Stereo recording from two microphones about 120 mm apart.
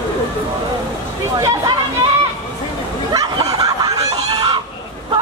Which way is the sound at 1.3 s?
30° right (ahead or behind).